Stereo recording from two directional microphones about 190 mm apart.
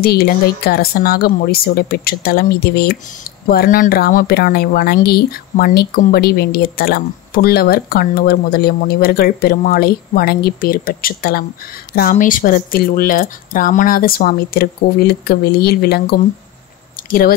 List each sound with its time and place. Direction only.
0.0 s a woman's voice: 55° left (ahead or behind)